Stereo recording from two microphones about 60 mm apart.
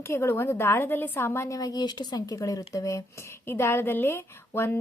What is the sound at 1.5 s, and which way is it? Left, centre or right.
Speech, left.